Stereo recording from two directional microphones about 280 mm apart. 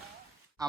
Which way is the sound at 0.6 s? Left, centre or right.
Centre.